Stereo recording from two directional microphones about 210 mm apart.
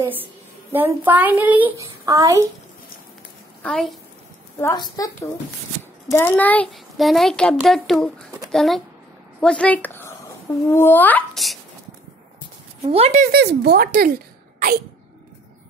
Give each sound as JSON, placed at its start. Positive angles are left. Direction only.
{"t": 0.0, "sound": "a woman's voice", "side_deg": -10}
{"t": 3.6, "sound": "a child's voice", "side_deg": 0}
{"t": 4.6, "sound": "a child's voice", "side_deg": 15}
{"t": 12.8, "sound": "speech", "side_deg": -30}